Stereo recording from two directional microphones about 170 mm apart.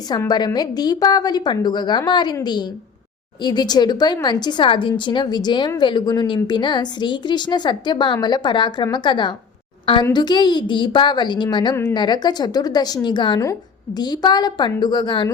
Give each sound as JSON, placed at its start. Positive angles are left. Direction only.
{"t": 0.1, "sound": "a woman's voice", "side_deg": 25}